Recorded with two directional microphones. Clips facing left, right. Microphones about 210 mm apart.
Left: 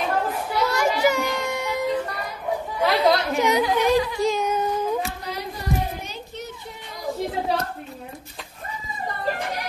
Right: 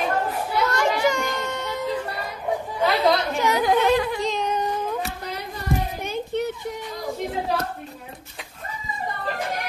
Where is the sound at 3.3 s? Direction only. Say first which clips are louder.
Left 2 dB; 20° left (ahead or behind).